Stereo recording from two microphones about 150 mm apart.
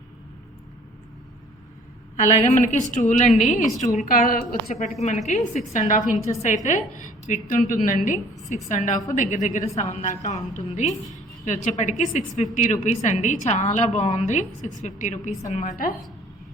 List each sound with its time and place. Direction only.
2.4 s a woman's voice: 55° left (ahead or behind)
3.9 s a woman's voice: 70° left (ahead or behind)
4.9 s a woman's voice: 50° left (ahead or behind)